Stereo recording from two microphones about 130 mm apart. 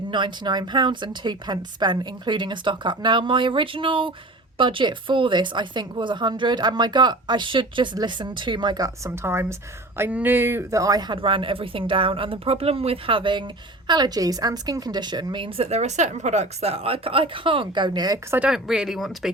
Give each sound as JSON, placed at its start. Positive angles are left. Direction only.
{"t": 0.1, "sound": "a woman's voice", "side_deg": -35}
{"t": 9.0, "sound": "speech", "side_deg": -20}
{"t": 11.2, "sound": "a woman's voice", "side_deg": -40}
{"t": 18.3, "sound": "speech", "side_deg": -10}